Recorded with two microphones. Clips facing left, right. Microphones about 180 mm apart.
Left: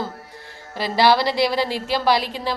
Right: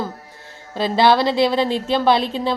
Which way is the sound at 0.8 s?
20° right (ahead or behind).